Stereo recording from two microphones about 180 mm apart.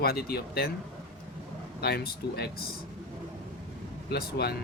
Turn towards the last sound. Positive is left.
turn(degrees=60)  # may be behind; listen again after turning